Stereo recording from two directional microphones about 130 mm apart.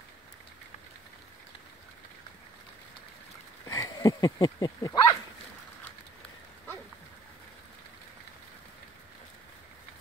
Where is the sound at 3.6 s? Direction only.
25° left (ahead or behind).